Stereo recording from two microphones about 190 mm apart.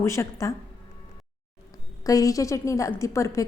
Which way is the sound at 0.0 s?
15° left (ahead or behind).